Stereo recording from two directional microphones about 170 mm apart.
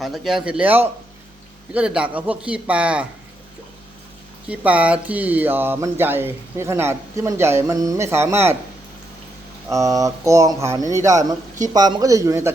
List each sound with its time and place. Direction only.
0.0 s a man's voice: centre (ahead or behind)
4.4 s speech: 10° right (ahead or behind)
9.6 s speech: 20° right (ahead or behind)